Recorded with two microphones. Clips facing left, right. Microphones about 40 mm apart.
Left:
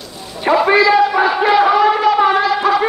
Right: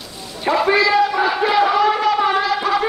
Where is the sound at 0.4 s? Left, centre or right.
Centre.